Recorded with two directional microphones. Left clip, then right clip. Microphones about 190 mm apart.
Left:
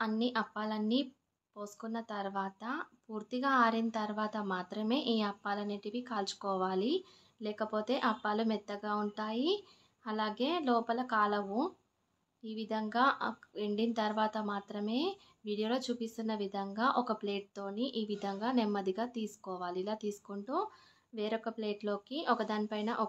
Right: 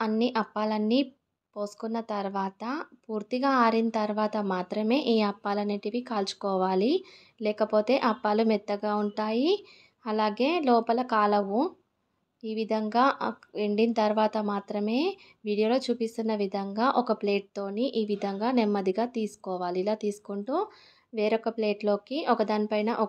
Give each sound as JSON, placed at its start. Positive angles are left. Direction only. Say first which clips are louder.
{"t": 0.1, "sound": "a woman's voice", "louder": "right 7 dB", "side_deg": -30}